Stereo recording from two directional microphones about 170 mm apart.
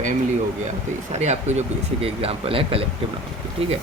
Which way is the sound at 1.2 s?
40° right (ahead or behind).